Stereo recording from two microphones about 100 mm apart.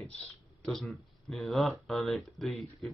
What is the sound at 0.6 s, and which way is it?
Speech, centre (ahead or behind).